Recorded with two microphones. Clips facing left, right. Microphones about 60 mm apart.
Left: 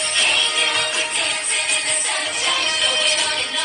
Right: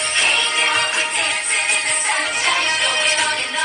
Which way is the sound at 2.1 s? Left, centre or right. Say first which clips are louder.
Right 3 dB; right.